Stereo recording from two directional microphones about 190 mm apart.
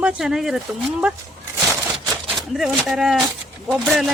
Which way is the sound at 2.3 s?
Centre (ahead or behind).